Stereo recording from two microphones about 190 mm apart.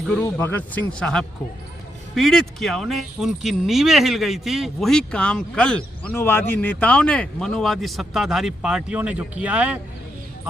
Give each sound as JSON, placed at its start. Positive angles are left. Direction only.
{"t": 0.1, "sound": "speech", "side_deg": 10}